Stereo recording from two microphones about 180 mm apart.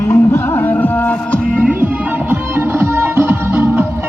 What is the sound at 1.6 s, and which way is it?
Music, 10° right (ahead or behind).